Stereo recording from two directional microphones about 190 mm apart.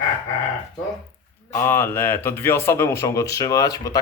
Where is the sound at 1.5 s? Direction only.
10° left (ahead or behind).